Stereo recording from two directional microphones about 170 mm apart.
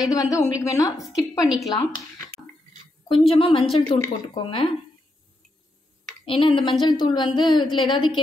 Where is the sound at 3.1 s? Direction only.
30° left (ahead or behind).